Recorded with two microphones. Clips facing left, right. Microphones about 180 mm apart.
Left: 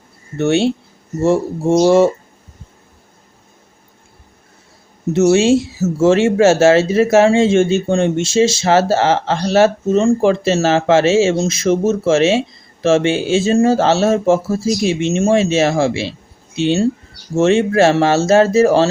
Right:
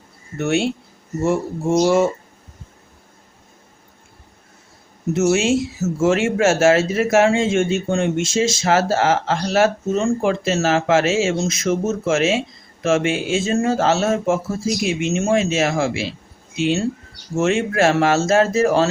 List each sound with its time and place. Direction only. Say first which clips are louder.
0.3 s speech: left 5 dB; 25° left (ahead or behind)
5.1 s speech: left 6 dB; 30° left (ahead or behind)